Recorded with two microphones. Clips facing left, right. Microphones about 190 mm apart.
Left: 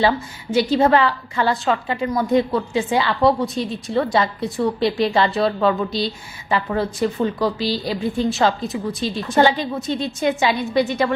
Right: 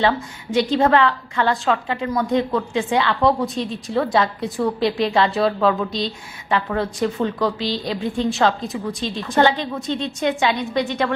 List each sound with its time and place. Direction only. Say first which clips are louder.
0.5 s a woman's voice: left 1 dB; 5° left (ahead or behind)